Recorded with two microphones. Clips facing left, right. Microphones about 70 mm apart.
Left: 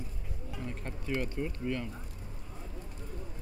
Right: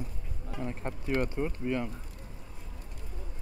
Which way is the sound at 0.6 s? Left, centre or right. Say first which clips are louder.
Right 5 dB; right.